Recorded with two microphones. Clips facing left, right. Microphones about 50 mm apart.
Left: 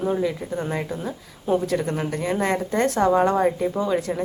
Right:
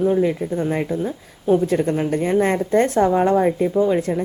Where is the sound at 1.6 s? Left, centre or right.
Right.